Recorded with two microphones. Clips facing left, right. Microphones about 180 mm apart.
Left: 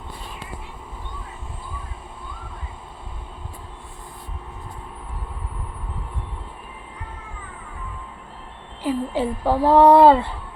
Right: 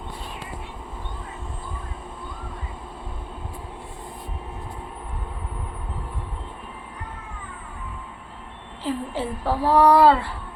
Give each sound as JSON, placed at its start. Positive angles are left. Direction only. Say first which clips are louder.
{"t": 8.8, "sound": "a woman's voice", "louder": "left 4 dB", "side_deg": 15}